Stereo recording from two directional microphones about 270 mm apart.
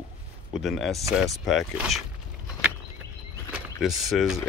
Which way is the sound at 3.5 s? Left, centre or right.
Centre.